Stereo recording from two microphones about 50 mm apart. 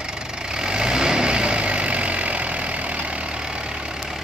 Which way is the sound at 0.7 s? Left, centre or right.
Centre.